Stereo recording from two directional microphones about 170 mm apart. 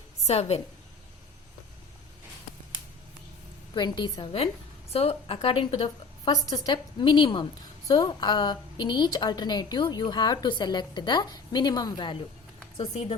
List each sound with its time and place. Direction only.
0.3 s a woman's voice: 40° left (ahead or behind)
3.8 s a woman's voice: 25° left (ahead or behind)
6.3 s a woman's voice: 20° left (ahead or behind)
12.7 s a woman's voice: 35° left (ahead or behind)